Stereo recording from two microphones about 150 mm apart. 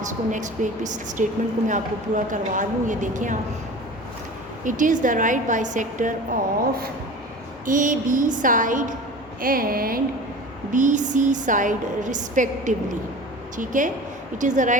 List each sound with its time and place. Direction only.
0.0 s a woman's voice: 55° right (ahead or behind)
4.6 s a woman's voice: 60° right (ahead or behind)
9.4 s a sound: 75° right (ahead or behind)
10.7 s a woman's voice: 55° right (ahead or behind)